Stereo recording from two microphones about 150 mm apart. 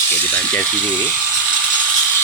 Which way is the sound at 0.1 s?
10° left (ahead or behind).